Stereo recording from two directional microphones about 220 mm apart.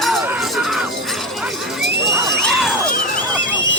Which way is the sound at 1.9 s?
50° right (ahead or behind).